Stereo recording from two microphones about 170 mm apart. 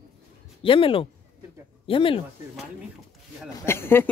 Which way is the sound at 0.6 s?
30° left (ahead or behind).